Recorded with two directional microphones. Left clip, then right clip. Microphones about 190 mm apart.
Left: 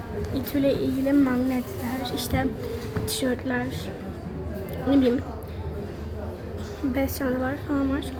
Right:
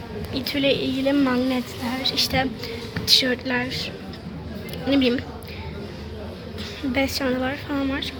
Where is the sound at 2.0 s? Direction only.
10° left (ahead or behind).